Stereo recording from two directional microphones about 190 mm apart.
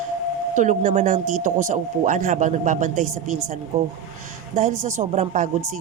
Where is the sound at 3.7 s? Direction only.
15° right (ahead or behind).